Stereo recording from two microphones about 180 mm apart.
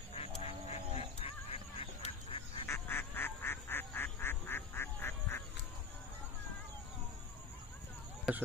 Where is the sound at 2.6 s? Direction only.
15° left (ahead or behind).